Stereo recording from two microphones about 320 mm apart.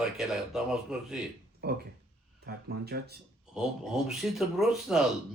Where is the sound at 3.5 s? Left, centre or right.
Centre.